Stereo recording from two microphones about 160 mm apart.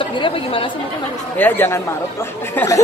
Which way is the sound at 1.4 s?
10° left (ahead or behind).